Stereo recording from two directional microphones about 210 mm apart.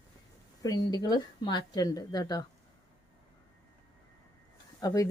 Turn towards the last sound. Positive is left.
turn(degrees=15)  # may be behind; listen again after turning